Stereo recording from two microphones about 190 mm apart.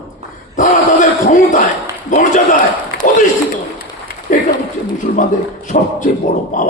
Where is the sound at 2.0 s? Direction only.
40° left (ahead or behind).